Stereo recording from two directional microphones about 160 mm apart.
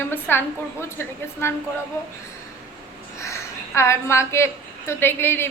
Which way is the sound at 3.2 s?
15° left (ahead or behind).